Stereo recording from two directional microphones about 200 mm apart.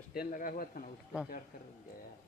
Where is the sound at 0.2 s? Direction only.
45° left (ahead or behind).